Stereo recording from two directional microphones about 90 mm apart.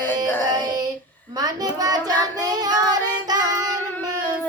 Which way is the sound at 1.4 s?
45° right (ahead or behind).